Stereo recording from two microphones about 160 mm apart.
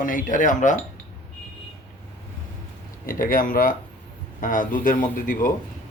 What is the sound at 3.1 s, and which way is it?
Speech, 60° left (ahead or behind).